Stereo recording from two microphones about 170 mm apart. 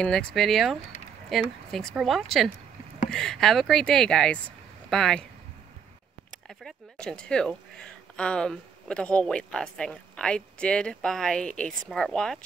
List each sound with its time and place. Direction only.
0.0 s speech: 5° left (ahead or behind)
6.6 s speech: 5° left (ahead or behind)